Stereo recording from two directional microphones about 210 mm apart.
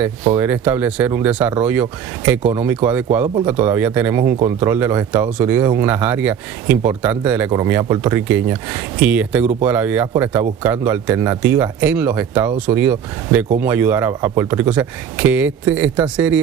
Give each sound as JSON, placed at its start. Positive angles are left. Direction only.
{"t": 0.3, "sound": "speech", "side_deg": -10}